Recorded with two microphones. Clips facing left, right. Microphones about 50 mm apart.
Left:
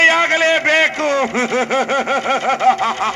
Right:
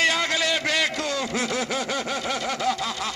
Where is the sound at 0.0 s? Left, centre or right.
Left.